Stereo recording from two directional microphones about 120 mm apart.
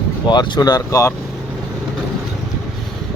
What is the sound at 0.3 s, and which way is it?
Speech, 35° left (ahead or behind).